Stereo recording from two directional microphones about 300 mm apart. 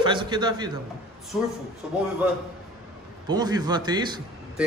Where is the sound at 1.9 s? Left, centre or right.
Centre.